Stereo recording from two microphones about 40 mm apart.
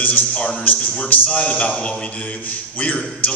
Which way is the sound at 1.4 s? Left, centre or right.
Left.